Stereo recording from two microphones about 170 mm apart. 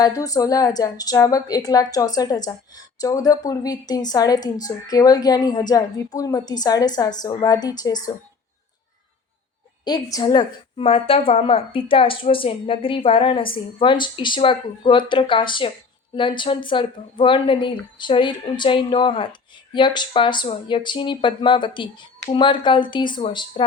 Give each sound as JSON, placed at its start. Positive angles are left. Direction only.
{"t": 0.0, "sound": "speech", "side_deg": 20}
{"t": 9.8, "sound": "a woman's voice", "side_deg": 25}